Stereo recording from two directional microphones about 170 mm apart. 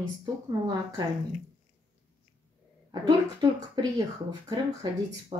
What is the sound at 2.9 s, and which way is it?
Speech, 25° right (ahead or behind).